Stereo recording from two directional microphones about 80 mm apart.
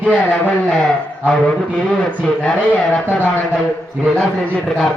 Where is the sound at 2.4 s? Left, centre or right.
Centre.